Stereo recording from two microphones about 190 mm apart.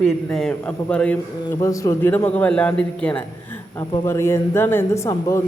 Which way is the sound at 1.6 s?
15° left (ahead or behind).